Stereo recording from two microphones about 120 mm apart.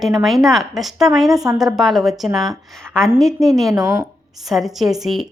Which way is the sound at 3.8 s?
30° right (ahead or behind).